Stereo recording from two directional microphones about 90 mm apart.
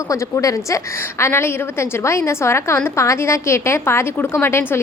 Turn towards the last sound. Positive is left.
turn(degrees=30)  # may be behind; listen again after turning